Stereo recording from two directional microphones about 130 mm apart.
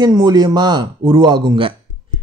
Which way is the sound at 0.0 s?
30° right (ahead or behind).